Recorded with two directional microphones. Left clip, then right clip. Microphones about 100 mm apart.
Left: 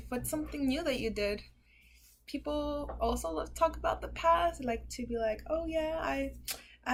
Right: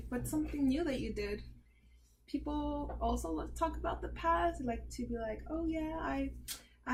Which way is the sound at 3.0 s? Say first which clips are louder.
Left 4 dB; 30° left (ahead or behind).